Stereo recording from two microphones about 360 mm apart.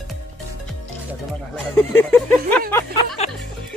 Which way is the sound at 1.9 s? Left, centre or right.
Centre.